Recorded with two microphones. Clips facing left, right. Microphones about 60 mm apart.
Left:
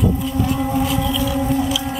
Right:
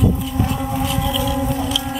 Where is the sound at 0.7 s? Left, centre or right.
Centre.